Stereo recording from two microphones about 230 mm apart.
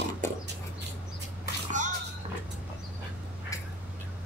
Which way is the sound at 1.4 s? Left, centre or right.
Right.